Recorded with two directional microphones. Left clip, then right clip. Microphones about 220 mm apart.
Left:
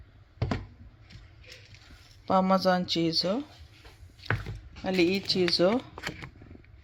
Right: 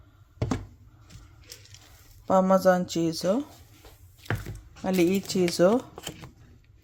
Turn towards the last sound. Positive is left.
turn(degrees=-20)  # may be behind; listen again after turning